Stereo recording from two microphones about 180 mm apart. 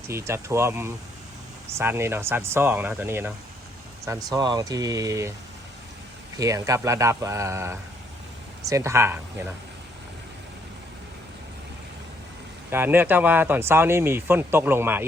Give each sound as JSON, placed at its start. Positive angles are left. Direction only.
{"t": 0.1, "sound": "speech", "side_deg": -15}
{"t": 6.3, "sound": "speech", "side_deg": -20}
{"t": 12.7, "sound": "speech", "side_deg": -10}